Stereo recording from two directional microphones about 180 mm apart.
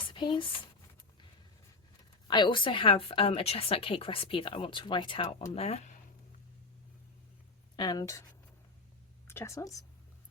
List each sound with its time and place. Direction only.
0.1 s speech: 25° left (ahead or behind)
2.2 s a woman's voice: 25° left (ahead or behind)
7.8 s a woman's voice: 20° left (ahead or behind)
9.2 s a woman's voice: 15° left (ahead or behind)